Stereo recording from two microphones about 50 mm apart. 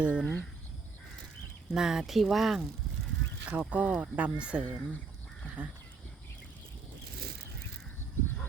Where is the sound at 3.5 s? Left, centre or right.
Right.